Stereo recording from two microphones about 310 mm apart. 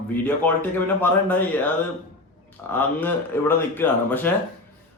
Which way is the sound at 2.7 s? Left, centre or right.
Centre.